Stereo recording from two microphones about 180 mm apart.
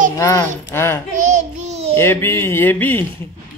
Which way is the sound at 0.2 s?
15° left (ahead or behind).